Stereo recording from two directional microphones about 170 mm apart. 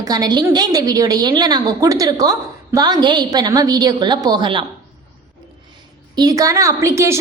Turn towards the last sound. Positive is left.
turn(degrees=-15)  # may be behind; listen again after turning